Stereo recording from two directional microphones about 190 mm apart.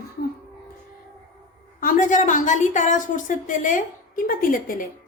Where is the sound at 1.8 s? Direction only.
45° left (ahead or behind).